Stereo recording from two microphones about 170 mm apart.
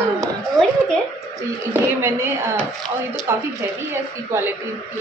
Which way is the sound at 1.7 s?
15° right (ahead or behind).